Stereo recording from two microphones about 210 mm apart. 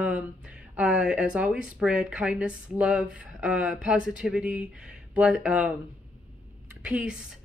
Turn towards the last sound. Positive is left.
turn(degrees=-5)  # may be behind; listen again after turning